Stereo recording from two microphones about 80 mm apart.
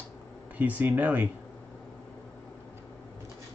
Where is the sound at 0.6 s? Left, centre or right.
Centre.